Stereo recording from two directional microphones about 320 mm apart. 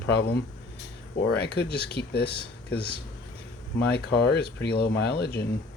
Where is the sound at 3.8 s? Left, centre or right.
Left.